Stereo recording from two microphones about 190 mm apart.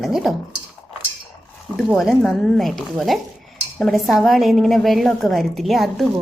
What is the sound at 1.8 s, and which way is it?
A woman's voice, centre (ahead or behind).